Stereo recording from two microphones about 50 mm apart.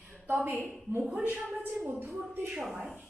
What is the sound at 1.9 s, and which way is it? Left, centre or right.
Speech, right.